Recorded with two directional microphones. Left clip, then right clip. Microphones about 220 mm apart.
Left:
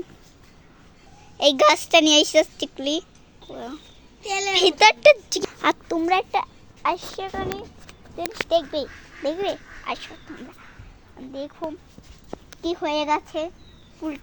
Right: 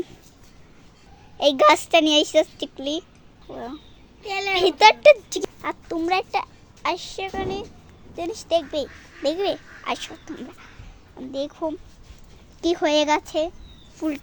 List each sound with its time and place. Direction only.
1.4 s a woman's voice: centre (ahead or behind)
4.2 s a child's voice: 25° right (ahead or behind)
4.5 s a woman's voice: centre (ahead or behind)
9.3 s speech: 15° right (ahead or behind)
12.6 s speech: 25° right (ahead or behind)
14.0 s speech: 30° right (ahead or behind)